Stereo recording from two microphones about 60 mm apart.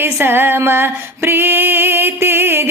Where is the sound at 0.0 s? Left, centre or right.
Right.